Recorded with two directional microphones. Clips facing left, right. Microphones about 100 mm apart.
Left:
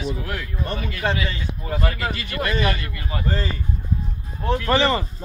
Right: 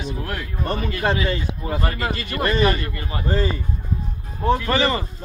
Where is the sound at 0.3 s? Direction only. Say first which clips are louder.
Right 2 dB; 40° right (ahead or behind).